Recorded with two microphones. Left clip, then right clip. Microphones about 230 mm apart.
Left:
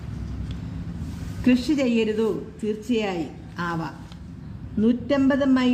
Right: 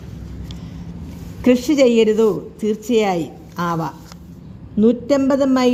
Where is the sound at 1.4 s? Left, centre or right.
Right.